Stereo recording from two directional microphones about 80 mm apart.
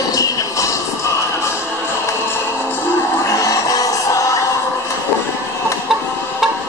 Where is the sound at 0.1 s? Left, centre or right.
Left.